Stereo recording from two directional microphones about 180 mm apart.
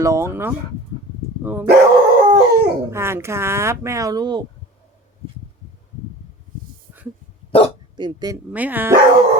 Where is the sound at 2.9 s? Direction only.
15° right (ahead or behind).